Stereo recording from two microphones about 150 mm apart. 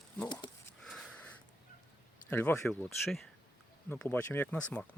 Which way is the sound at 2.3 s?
10° left (ahead or behind).